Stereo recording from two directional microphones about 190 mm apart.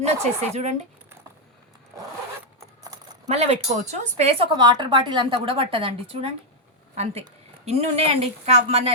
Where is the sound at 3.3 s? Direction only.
35° right (ahead or behind).